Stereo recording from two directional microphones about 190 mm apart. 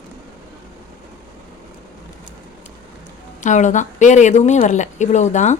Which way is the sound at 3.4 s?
40° left (ahead or behind).